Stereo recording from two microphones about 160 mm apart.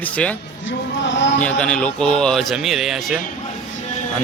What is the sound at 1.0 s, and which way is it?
Speech, 90° left.